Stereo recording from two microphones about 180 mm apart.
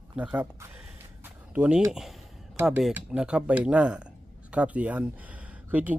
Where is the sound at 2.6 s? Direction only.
5° right (ahead or behind).